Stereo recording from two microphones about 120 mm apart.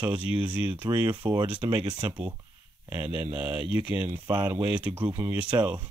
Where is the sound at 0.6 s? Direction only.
15° right (ahead or behind).